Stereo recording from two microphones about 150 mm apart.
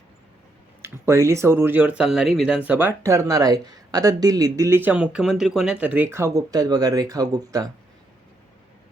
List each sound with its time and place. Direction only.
0.8 s speech: 20° right (ahead or behind)
2.6 s speech: 15° right (ahead or behind)